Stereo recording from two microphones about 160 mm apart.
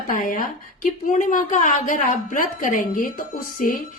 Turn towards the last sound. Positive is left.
turn(degrees=60)  # may be behind; listen again after turning